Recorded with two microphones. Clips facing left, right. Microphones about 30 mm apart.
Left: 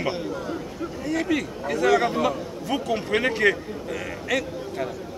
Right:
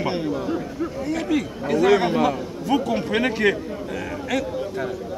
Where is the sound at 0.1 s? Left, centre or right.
Right.